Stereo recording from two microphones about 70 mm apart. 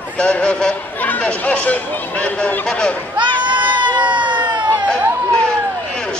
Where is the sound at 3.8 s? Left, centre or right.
Right.